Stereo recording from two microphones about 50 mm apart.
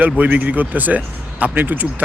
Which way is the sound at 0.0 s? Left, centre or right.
Right.